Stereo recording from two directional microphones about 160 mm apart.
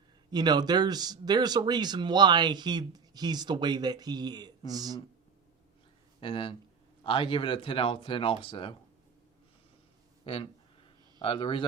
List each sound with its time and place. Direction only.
0.3 s speech: 25° right (ahead or behind)
6.1 s speech: 30° left (ahead or behind)
10.3 s speech: 35° left (ahead or behind)